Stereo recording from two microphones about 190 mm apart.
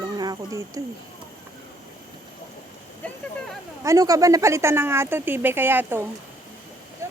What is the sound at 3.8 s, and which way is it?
Speech, 15° right (ahead or behind).